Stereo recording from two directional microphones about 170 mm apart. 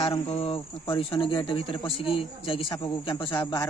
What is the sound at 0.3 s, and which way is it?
A man's voice, 35° left (ahead or behind).